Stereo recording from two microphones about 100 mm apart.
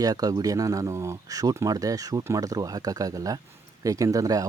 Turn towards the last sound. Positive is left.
turn(degrees=-35)  # may be behind; listen again after turning